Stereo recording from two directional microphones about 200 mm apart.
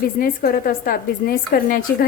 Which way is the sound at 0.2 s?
45° left (ahead or behind).